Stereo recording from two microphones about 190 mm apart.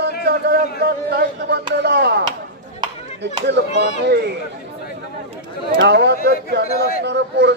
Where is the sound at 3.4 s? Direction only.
65° right (ahead or behind).